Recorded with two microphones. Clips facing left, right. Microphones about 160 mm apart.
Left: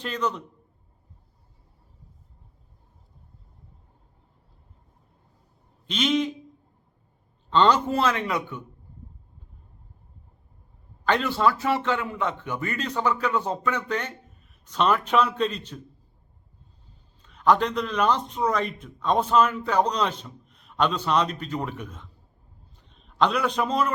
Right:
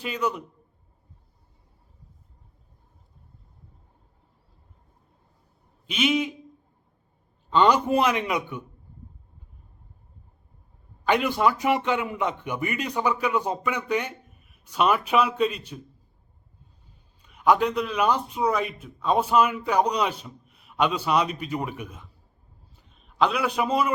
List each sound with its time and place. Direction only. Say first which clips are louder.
0.0 s a man's voice: even; 10° right (ahead or behind)
5.9 s a man's voice: even; 10° right (ahead or behind)
7.5 s a man's voice: right 1 dB; 10° right (ahead or behind)
11.0 s a man's voice: right 1 dB; 15° right (ahead or behind)
17.2 s a man's voice: even; 10° right (ahead or behind)
22.7 s a sound: left 1 dB; 5° right (ahead or behind)